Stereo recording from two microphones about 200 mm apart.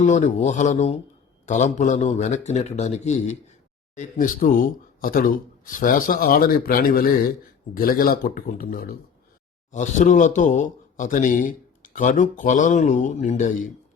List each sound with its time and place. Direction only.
0.0 s speech: 40° left (ahead or behind)
9.7 s speech: 35° left (ahead or behind)